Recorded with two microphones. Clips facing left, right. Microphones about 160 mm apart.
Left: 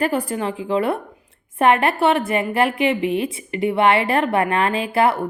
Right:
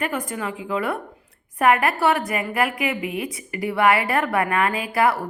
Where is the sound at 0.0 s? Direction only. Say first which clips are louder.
Left 5 dB; 35° left (ahead or behind).